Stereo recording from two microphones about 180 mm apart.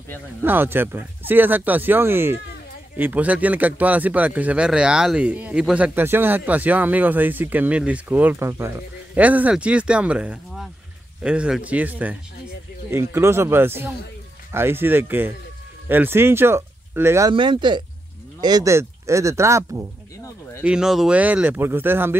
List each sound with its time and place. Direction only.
0.4 s speech: 10° right (ahead or behind)
17.3 s speech: 25° right (ahead or behind)
20.6 s speech: 5° right (ahead or behind)